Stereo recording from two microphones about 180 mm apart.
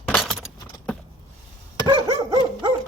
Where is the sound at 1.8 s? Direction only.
25° right (ahead or behind).